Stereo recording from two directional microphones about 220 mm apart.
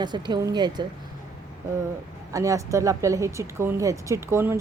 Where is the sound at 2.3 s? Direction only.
15° right (ahead or behind).